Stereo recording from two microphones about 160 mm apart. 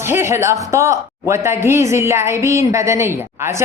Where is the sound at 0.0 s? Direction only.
15° right (ahead or behind).